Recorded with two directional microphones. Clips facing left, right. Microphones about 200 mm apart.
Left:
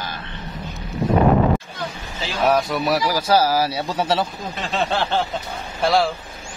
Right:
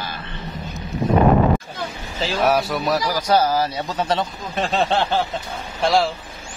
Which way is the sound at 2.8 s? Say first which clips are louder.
Left 1 dB; 10° left (ahead or behind).